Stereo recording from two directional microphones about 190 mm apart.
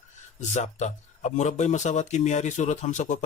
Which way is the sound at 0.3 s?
40° left (ahead or behind).